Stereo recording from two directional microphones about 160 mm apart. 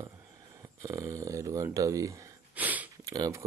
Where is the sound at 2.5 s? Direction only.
10° right (ahead or behind).